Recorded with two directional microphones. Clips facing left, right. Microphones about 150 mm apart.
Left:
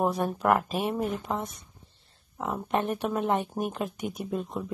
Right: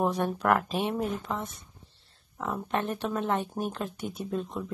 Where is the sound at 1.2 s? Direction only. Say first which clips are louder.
Left 2 dB; 15° left (ahead or behind).